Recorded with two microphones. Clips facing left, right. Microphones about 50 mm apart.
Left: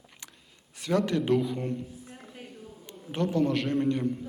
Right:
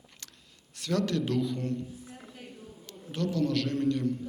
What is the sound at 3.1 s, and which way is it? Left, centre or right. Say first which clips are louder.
A man's voice: left 2 dB; left.